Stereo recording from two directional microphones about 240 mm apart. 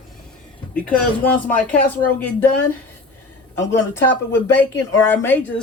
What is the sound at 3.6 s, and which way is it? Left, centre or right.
Speech, centre.